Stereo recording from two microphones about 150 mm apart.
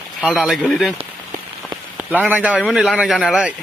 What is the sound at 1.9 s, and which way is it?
A man's voice, 10° right (ahead or behind).